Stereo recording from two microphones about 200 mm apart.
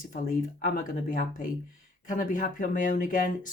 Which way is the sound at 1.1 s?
40° left (ahead or behind).